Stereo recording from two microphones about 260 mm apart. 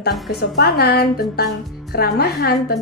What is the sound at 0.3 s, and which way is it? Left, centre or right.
A woman's voice, left.